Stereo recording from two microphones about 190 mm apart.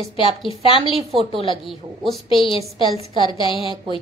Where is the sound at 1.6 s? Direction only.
Centre (ahead or behind).